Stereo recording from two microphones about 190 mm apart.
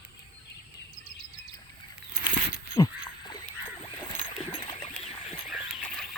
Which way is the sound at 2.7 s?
20° left (ahead or behind).